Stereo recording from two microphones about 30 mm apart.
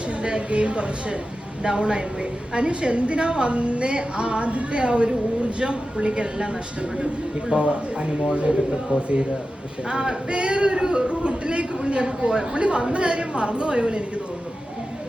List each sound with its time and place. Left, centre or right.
0.2 s a woman's voice: right
9.9 s male singing: right
10.3 s a woman's voice: right